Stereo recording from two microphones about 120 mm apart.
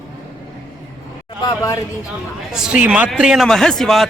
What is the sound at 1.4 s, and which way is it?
Speech, 30° left (ahead or behind).